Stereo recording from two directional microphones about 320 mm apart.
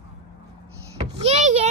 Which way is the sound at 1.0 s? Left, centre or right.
Centre.